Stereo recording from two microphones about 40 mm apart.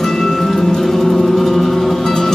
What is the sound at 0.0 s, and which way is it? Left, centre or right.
Music, centre.